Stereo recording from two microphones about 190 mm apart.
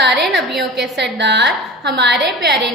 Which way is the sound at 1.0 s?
65° right (ahead or behind).